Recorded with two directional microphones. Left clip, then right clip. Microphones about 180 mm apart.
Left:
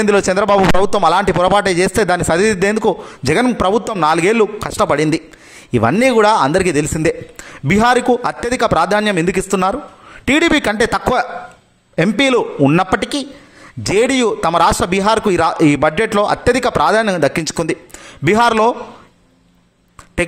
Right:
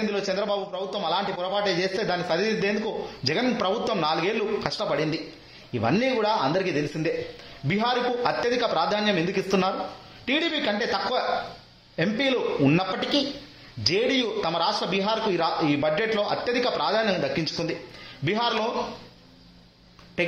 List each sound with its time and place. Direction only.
0.1 s a man's voice: 50° left (ahead or behind)